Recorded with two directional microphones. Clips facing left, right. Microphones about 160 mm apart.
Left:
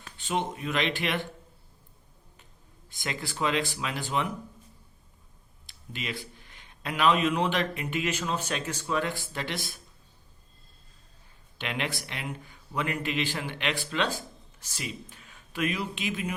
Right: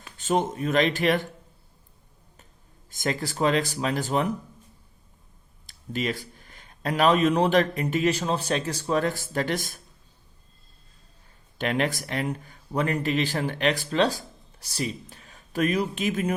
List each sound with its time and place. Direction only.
0.2 s speech: 45° right (ahead or behind)
2.9 s speech: 40° right (ahead or behind)
5.6 s speech: 40° right (ahead or behind)
11.5 s speech: 45° right (ahead or behind)